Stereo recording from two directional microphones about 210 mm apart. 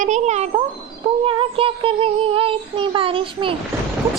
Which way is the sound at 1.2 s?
25° right (ahead or behind).